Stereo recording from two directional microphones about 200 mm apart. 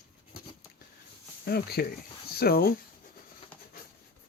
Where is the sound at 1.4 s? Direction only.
50° left (ahead or behind).